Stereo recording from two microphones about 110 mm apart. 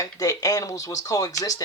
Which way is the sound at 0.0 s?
30° left (ahead or behind).